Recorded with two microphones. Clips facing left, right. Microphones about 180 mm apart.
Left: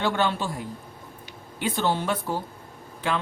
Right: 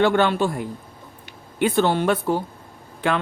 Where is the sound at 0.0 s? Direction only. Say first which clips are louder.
Right 7 dB; 60° right (ahead or behind).